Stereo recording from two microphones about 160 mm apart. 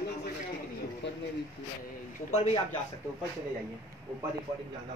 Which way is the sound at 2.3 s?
45° left (ahead or behind).